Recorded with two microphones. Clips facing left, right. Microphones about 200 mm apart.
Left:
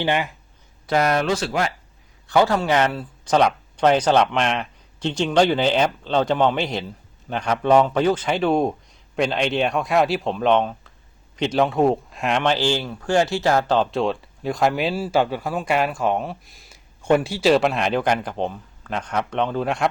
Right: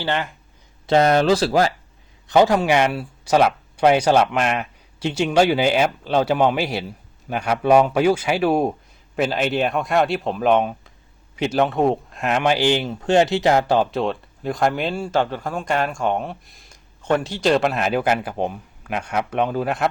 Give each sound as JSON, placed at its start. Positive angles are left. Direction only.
{"t": 0.0, "sound": "speech", "side_deg": 15}
{"t": 0.9, "sound": "speech", "side_deg": -25}
{"t": 2.2, "sound": "speech", "side_deg": -20}
{"t": 13.9, "sound": "speech", "side_deg": 0}